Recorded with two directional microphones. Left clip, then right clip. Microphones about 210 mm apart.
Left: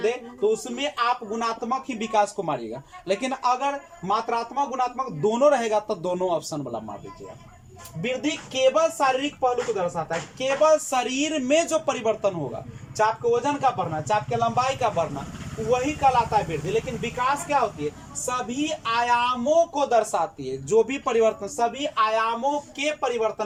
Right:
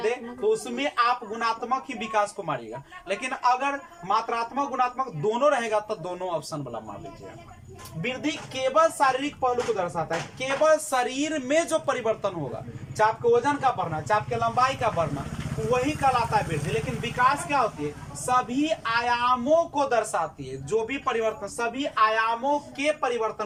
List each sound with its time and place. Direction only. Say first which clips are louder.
0.0 s a woman's voice: left 2 dB; 15° left (ahead or behind)
8.0 s a woman's voice: left 3 dB; 15° left (ahead or behind)